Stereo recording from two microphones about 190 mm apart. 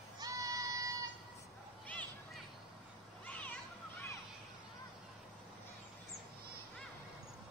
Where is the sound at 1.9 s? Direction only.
5° left (ahead or behind).